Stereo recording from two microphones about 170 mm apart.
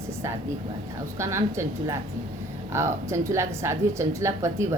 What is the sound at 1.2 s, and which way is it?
A woman's voice, 15° right (ahead or behind).